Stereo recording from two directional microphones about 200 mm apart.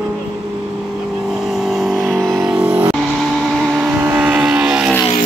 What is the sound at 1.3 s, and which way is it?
Vehicle, centre (ahead or behind).